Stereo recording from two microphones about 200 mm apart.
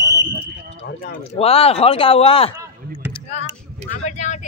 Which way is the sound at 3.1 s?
30° left (ahead or behind).